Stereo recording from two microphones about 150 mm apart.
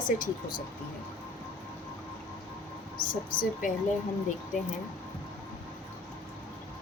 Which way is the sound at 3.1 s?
65° left (ahead or behind).